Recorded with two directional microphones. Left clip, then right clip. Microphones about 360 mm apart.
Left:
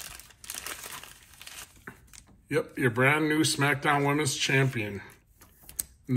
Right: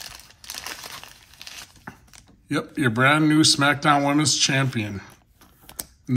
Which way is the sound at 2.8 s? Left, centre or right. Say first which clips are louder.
Right 6 dB; centre.